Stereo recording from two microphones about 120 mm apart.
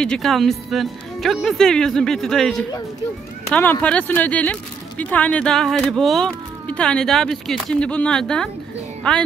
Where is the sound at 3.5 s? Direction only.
15° left (ahead or behind).